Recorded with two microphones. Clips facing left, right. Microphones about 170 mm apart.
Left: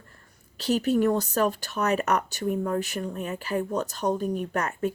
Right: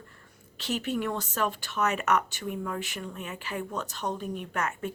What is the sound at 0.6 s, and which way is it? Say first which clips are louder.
Speech: left 8 dB; 40° left (ahead or behind).